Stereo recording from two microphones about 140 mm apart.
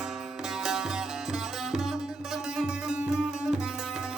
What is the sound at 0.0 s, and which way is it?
Sitar, 5° right (ahead or behind).